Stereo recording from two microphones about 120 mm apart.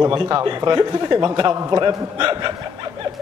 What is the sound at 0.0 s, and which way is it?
A man's voice, 35° right (ahead or behind).